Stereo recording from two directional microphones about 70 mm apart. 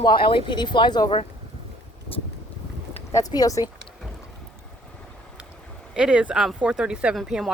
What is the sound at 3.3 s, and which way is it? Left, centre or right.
Speech, left.